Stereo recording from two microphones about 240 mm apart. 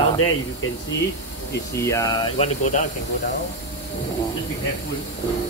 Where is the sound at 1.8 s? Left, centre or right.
Centre.